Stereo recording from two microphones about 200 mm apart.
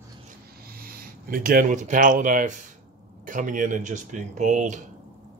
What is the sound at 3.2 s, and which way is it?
Speech, 40° right (ahead or behind).